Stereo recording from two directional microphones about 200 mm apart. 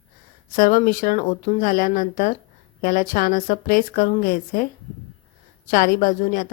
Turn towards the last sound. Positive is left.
turn(degrees=40)  # may be behind; listen again after turning